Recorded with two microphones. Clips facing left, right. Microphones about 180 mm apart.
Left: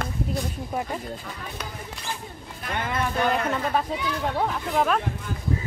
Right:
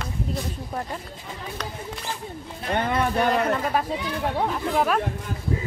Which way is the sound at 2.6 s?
35° right (ahead or behind).